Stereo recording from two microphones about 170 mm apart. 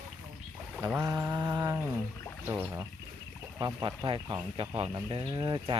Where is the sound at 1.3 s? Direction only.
25° right (ahead or behind).